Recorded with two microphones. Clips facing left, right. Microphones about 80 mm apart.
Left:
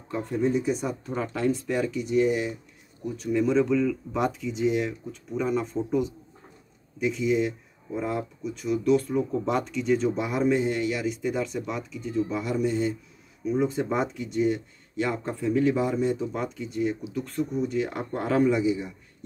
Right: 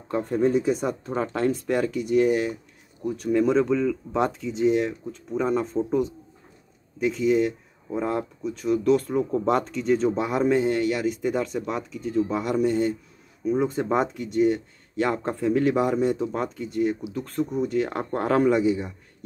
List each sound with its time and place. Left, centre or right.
0.1 s speech: right